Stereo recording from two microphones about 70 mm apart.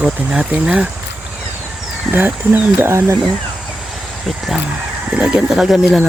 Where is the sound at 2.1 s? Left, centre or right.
Right.